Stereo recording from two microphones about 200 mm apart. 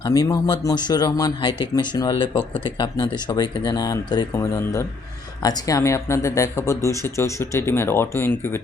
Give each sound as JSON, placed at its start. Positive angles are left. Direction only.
{"t": 0.0, "sound": "speech", "side_deg": 20}